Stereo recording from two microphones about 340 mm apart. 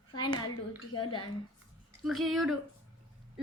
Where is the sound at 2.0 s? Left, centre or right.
Centre.